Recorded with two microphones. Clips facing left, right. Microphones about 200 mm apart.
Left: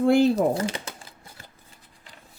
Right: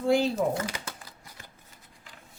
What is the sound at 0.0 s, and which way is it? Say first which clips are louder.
Speech: left 6 dB; 60° left (ahead or behind).